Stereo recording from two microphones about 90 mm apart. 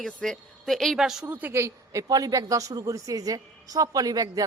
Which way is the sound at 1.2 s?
20° right (ahead or behind).